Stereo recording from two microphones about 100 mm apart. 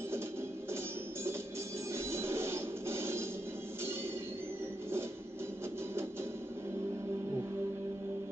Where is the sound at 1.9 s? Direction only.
25° right (ahead or behind).